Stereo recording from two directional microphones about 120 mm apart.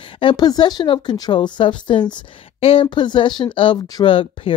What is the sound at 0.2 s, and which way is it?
Speech, 40° left (ahead or behind).